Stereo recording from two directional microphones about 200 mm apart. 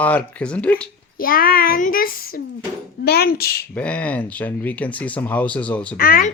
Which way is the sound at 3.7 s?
5° left (ahead or behind).